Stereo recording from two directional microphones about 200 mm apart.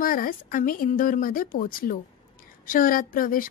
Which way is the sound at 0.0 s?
45° left (ahead or behind).